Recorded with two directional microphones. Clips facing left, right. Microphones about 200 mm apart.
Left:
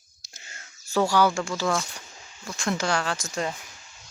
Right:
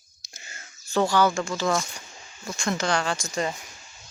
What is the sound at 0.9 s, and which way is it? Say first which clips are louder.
Speech: even; 10° left (ahead or behind).